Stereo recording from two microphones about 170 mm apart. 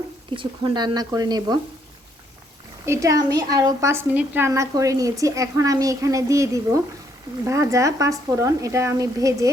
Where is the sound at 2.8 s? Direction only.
20° right (ahead or behind).